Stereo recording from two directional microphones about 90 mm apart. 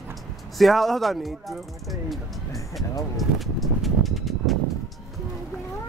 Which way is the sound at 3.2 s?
Centre (ahead or behind).